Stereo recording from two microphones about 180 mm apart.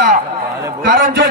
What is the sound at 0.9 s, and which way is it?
Speech, 50° right (ahead or behind).